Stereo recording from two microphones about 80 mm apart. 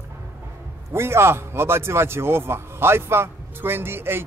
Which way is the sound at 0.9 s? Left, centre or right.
Right.